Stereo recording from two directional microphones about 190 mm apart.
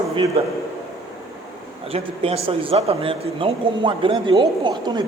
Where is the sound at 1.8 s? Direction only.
30° right (ahead or behind).